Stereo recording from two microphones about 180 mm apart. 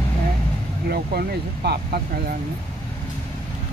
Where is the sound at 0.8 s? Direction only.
60° right (ahead or behind).